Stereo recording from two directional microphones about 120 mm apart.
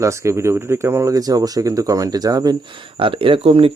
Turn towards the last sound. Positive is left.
turn(degrees=-50)  # may be behind; listen again after turning